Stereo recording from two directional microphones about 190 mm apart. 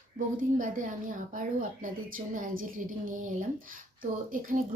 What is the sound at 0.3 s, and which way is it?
A woman's voice, 45° right (ahead or behind).